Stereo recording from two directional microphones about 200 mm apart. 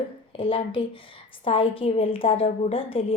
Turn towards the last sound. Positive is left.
turn(degrees=30)  # may be behind; listen again after turning